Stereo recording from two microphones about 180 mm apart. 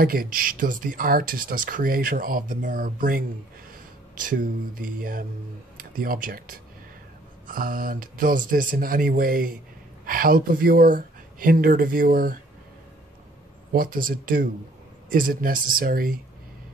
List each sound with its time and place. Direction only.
0.0 s speech: 55° right (ahead or behind)
13.7 s speech: 50° right (ahead or behind)